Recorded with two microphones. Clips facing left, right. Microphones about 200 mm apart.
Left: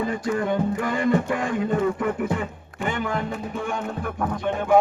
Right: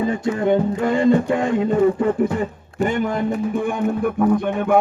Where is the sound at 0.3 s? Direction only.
25° right (ahead or behind); by 3.2 s 40° right (ahead or behind).